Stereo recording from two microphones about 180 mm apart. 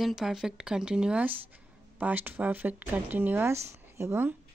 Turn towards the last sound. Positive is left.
turn(degrees=-10)  # may be behind; listen again after turning